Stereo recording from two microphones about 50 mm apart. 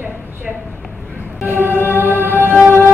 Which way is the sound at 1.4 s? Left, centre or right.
Right.